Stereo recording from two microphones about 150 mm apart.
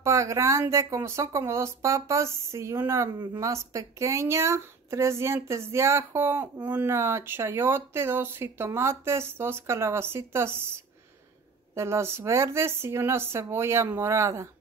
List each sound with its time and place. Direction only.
0.0 s a woman's voice: 20° right (ahead or behind)